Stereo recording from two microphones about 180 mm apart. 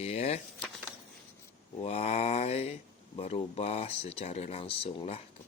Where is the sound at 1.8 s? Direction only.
35° left (ahead or behind).